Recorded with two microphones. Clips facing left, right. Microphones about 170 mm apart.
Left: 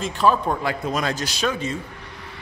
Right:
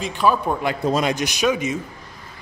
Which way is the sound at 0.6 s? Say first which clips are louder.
Right 4 dB; 20° right (ahead or behind).